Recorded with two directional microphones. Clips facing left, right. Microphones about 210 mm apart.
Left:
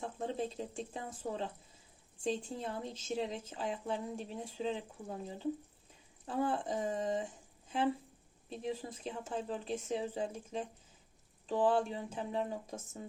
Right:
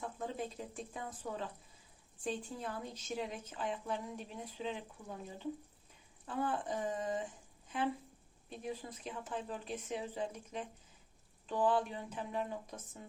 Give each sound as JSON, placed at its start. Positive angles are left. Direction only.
{"t": 0.0, "sound": "a woman's voice", "side_deg": 30}
{"t": 8.4, "sound": "a woman's voice", "side_deg": 30}